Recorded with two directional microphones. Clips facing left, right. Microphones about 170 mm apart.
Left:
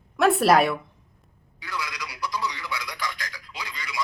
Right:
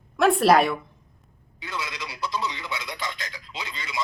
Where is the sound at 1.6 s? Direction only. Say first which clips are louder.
Even; 25° right (ahead or behind).